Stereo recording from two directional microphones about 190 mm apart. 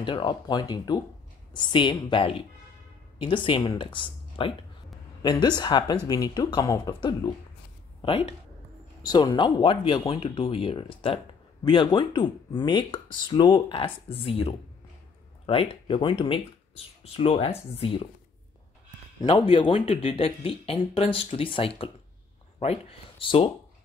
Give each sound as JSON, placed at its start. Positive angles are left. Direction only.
{"t": 0.0, "sound": "speech", "side_deg": 25}
{"t": 19.2, "sound": "speech", "side_deg": 25}